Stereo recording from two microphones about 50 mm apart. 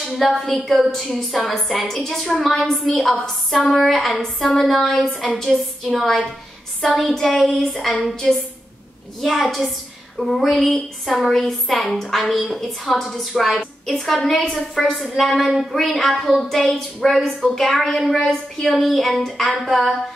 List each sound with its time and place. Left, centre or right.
0.0 s a woman's voice: centre
4.9 s a woman's voice: left
7.0 s a woman's voice: centre
10.5 s a woman's voice: centre
11.1 s a woman's voice: centre